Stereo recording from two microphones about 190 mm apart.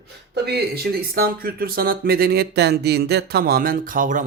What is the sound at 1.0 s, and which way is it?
Speech, 50° right (ahead or behind).